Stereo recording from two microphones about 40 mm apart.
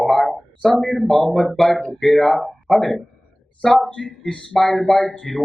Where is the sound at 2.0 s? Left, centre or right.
Centre.